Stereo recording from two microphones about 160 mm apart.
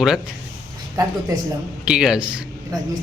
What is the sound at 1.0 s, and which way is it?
Speech, 25° right (ahead or behind).